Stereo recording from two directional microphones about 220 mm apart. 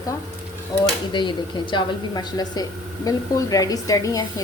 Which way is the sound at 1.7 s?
20° left (ahead or behind).